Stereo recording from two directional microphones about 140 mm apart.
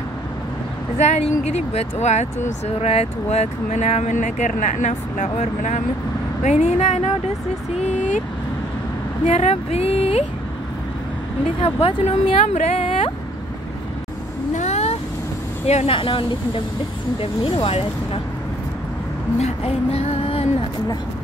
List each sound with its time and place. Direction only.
0.9 s speech: 50° left (ahead or behind)
9.3 s speech: 50° left (ahead or behind)
11.6 s speech: 45° left (ahead or behind)
14.5 s vehicle: 55° left (ahead or behind)
15.6 s speech: 50° left (ahead or behind)
19.3 s speech: 50° left (ahead or behind)